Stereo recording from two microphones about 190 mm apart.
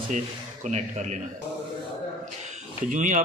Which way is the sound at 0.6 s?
40° right (ahead or behind).